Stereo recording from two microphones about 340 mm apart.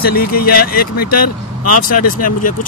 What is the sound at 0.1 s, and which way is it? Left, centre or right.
Speech, left.